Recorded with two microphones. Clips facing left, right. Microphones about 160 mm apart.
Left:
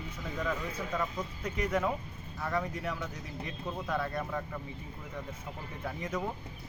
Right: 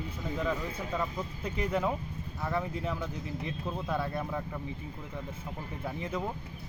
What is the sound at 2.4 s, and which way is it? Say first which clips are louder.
Speech: right 1 dB; 5° right (ahead or behind).